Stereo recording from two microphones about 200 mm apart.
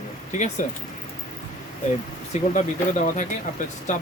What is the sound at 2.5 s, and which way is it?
Speech, 40° left (ahead or behind).